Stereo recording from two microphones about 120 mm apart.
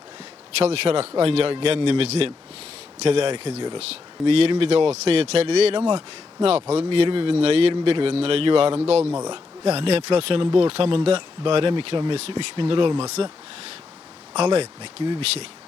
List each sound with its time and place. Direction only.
0.6 s speech: 60° right (ahead or behind)
3.8 s speech: 60° right (ahead or behind)
8.9 s speech: 60° right (ahead or behind)
9.1 s speech: 35° right (ahead or behind)
9.6 s speech: 55° right (ahead or behind)
12.1 s speech: 60° right (ahead or behind)
14.3 s speech: 60° right (ahead or behind)